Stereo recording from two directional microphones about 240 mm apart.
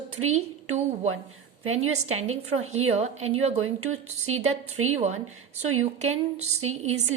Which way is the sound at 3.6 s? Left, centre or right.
Right.